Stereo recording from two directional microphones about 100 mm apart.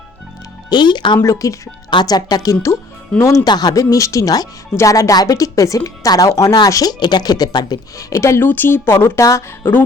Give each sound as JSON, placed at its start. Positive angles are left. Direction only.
{"t": 0.7, "sound": "speech", "side_deg": 50}
{"t": 1.2, "sound": "speech", "side_deg": 30}
{"t": 1.9, "sound": "speech", "side_deg": 45}
{"t": 3.2, "sound": "speech", "side_deg": 30}
{"t": 3.4, "sound": "speech", "side_deg": 45}